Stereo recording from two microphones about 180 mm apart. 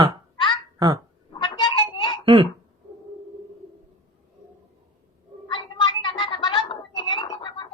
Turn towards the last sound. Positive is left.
turn(degrees=30)  # may be behind; listen again after turning